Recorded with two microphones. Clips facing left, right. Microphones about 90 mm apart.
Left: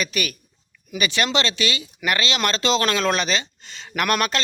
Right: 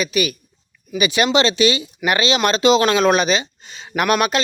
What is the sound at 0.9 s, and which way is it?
Speech, 15° right (ahead or behind).